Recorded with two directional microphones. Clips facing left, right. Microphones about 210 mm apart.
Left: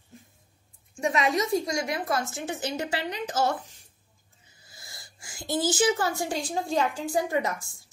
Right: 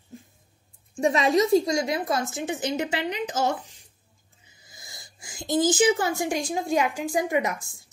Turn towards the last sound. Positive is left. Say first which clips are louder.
# right 2 dB
turn(degrees=-15)  # may be behind; listen again after turning